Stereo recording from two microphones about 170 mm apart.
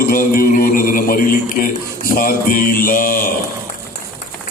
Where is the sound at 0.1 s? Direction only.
55° left (ahead or behind).